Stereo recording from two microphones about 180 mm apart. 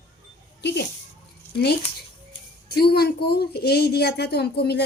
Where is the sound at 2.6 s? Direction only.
60° left (ahead or behind).